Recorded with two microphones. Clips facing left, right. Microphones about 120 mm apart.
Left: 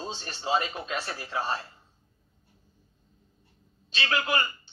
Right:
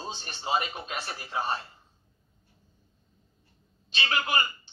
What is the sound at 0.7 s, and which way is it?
Speech, 25° right (ahead or behind).